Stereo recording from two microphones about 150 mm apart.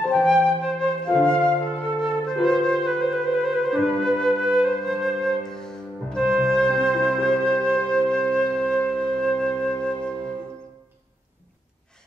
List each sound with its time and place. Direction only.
0.1 s music: 5° left (ahead or behind)